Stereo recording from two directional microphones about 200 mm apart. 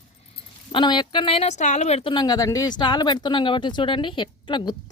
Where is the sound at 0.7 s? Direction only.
25° left (ahead or behind).